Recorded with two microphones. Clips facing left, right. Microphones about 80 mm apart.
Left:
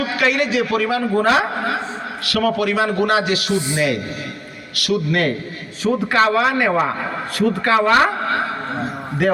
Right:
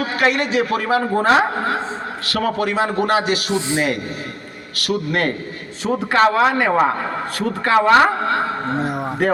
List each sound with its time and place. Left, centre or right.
0.0 s a man's voice: right
4.8 s a man's voice: right